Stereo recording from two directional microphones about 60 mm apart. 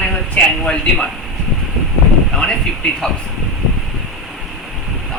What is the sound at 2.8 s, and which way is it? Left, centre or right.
Speech, centre.